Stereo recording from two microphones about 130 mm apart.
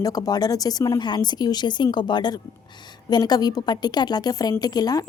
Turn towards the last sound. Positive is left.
turn(degrees=30)  # may be behind; listen again after turning